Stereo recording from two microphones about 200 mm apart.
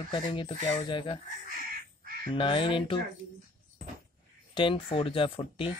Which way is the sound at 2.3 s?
25° left (ahead or behind).